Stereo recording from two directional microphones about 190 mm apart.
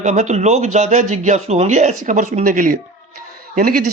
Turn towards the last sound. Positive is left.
turn(degrees=-45)  # may be behind; listen again after turning